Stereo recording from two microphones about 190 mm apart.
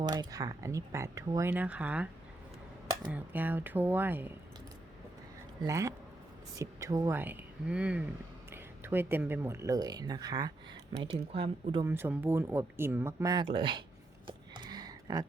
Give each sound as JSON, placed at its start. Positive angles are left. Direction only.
{"t": 0.0, "sound": "speech", "side_deg": -20}
{"t": 3.1, "sound": "speech", "side_deg": -10}
{"t": 5.6, "sound": "speech", "side_deg": -15}
{"t": 11.9, "sound": "speech", "side_deg": -10}
{"t": 14.3, "sound": "a sound", "side_deg": -25}